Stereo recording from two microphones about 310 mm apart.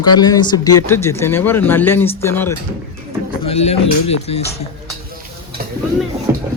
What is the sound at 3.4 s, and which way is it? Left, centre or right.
Speech, centre.